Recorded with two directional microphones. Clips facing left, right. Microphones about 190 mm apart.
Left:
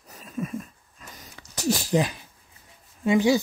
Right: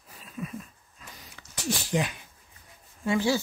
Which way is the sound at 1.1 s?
45° left (ahead or behind).